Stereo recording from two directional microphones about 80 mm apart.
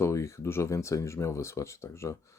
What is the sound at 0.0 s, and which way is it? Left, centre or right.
Speech, left.